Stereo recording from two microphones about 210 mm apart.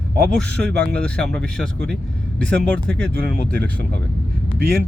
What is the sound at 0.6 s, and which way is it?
Speech, 50° right (ahead or behind).